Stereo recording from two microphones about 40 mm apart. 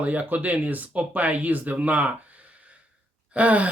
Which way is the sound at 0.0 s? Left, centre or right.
Right.